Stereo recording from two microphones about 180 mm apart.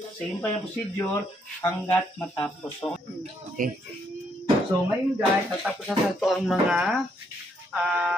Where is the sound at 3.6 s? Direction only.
50° right (ahead or behind).